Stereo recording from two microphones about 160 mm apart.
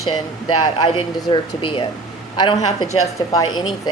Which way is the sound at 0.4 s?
25° left (ahead or behind).